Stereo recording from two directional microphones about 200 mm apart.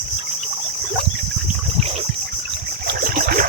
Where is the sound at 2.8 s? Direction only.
45° right (ahead or behind).